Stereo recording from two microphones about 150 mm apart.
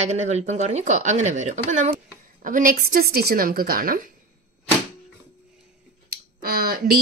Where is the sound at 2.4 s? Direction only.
65° right (ahead or behind).